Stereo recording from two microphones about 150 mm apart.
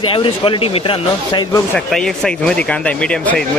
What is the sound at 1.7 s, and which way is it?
Speech, 5° left (ahead or behind).